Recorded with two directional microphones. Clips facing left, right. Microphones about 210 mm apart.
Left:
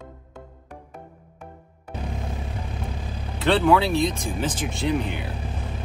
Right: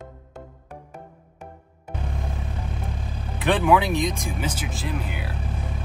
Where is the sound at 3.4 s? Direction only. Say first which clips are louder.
Left 1 dB; 15° right (ahead or behind).